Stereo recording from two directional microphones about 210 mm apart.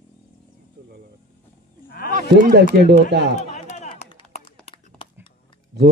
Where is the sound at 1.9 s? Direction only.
45° left (ahead or behind).